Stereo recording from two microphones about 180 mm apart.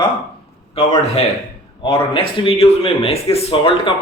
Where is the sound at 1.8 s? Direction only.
30° left (ahead or behind).